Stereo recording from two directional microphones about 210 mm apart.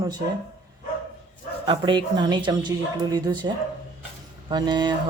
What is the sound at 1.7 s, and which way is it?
A man's voice, 20° right (ahead or behind).